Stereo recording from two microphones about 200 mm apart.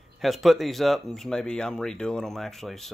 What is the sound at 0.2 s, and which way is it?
Speech, centre (ahead or behind).